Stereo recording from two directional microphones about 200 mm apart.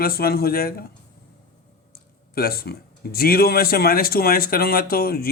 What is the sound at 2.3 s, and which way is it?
Speech, 50° left (ahead or behind).